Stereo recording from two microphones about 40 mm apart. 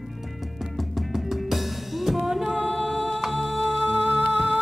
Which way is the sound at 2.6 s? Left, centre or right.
Centre.